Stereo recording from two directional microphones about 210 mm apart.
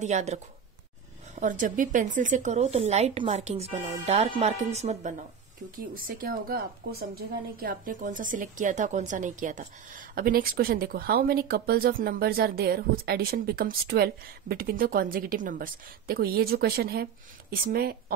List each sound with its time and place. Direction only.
0.0 s a woman's voice: 35° right (ahead or behind)
5.8 s speech: 40° right (ahead or behind)